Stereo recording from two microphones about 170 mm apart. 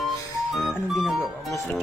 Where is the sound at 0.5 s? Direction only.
Centre (ahead or behind).